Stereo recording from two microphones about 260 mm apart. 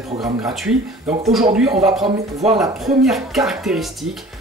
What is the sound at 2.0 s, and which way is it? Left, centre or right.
Speech, right.